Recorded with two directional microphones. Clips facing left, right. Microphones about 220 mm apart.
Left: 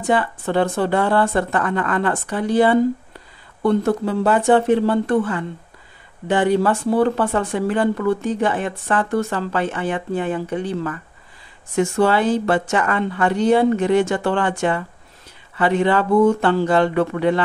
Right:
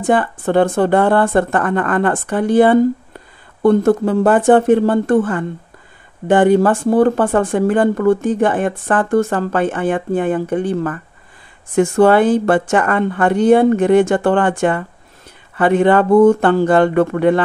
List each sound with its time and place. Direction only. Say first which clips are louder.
0.0 s speech: right 4 dB; 50° right (ahead or behind)